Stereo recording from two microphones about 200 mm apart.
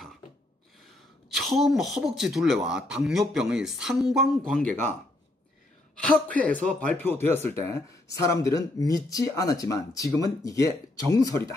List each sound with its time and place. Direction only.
1.3 s speech: centre (ahead or behind)
5.9 s a woman's voice: 5° left (ahead or behind)